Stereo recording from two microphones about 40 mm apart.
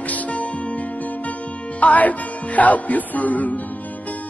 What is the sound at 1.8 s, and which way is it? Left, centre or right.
Speech, left.